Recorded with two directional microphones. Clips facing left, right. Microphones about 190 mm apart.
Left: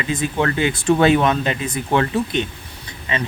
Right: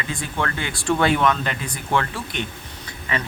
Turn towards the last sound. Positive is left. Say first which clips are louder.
# left 2 dB
turn(degrees=20)  # may be behind; listen again after turning